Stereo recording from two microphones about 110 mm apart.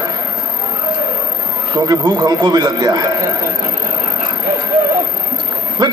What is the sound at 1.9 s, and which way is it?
A man's voice, 35° right (ahead or behind).